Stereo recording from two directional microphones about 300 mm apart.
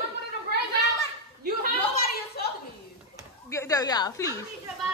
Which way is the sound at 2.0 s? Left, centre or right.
Left.